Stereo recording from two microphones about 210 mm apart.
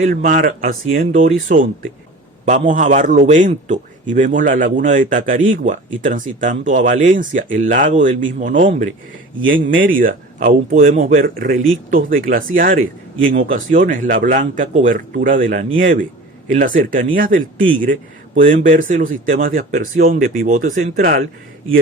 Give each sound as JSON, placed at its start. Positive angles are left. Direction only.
{"t": 0.0, "sound": "a man's voice", "side_deg": -40}
{"t": 2.4, "sound": "a man's voice", "side_deg": -35}